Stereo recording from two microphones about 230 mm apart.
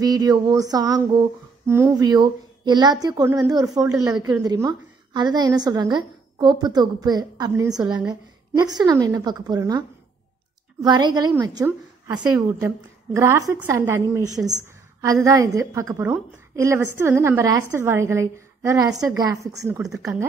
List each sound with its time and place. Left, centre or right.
0.0 s speech: centre